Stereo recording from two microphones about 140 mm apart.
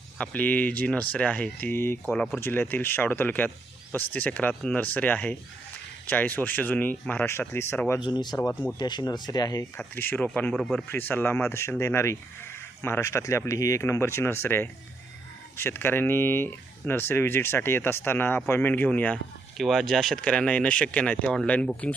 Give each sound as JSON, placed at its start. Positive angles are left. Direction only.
{"t": 0.2, "sound": "speech", "side_deg": 10}
{"t": 8.0, "sound": "speech", "side_deg": 30}
{"t": 8.4, "sound": "speech", "side_deg": 20}
{"t": 8.8, "sound": "speech", "side_deg": 30}
{"t": 10.5, "sound": "speech", "side_deg": 0}
{"t": 10.9, "sound": "speech", "side_deg": 15}